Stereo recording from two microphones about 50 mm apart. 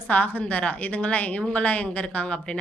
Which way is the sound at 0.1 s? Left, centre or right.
Left.